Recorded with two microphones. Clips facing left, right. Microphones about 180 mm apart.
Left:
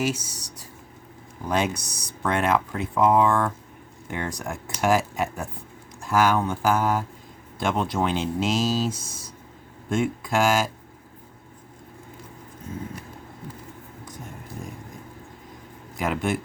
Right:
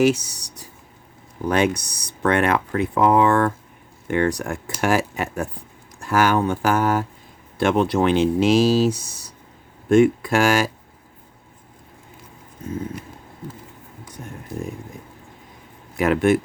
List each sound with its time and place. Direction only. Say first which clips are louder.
0.0 s speech: right 9 dB; 70° right (ahead or behind)
16.0 s speech: right 8 dB; 70° right (ahead or behind)